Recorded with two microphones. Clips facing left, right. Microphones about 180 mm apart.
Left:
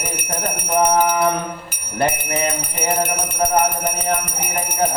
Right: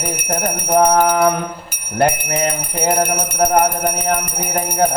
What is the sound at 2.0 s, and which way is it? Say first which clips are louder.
Speech: right 4 dB; 65° right (ahead or behind).